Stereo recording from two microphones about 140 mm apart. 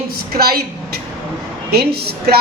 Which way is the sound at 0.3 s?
90° right.